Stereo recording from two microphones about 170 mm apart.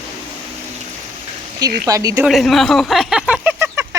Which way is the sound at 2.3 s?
Centre (ahead or behind).